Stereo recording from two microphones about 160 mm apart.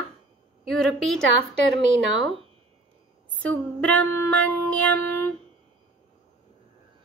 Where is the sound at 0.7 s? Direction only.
5° left (ahead or behind).